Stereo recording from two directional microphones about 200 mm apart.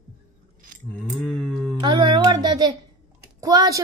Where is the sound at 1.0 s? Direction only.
Centre (ahead or behind).